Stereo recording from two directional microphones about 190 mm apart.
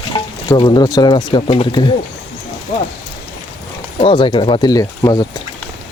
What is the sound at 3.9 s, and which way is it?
Speech, 25° left (ahead or behind).